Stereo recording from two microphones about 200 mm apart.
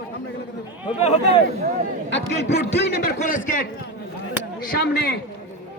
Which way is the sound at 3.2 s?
40° left (ahead or behind).